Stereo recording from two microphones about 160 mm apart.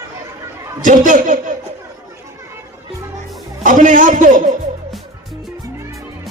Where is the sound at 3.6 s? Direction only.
55° right (ahead or behind).